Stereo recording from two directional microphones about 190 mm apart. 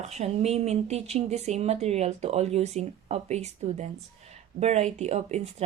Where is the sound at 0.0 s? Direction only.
35° right (ahead or behind).